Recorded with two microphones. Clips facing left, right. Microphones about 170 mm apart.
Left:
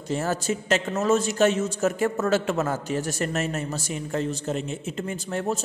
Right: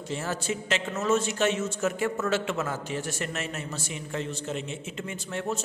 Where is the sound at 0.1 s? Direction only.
40° left (ahead or behind).